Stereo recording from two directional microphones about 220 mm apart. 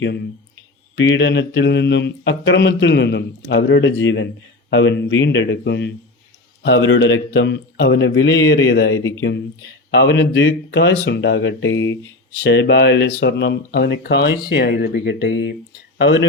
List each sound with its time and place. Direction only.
0.9 s speech: 55° left (ahead or behind)
9.0 s speech: 15° left (ahead or behind)
9.9 s speech: 55° left (ahead or behind)